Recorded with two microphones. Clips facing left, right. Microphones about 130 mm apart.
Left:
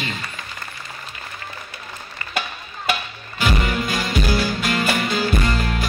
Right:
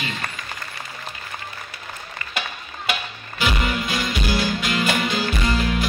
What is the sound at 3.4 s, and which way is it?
Music, 45° left (ahead or behind).